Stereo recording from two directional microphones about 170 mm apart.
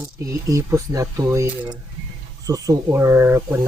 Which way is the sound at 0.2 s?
20° right (ahead or behind).